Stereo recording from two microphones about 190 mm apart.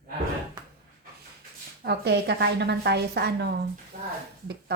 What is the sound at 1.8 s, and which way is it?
A woman's voice, 60° right (ahead or behind).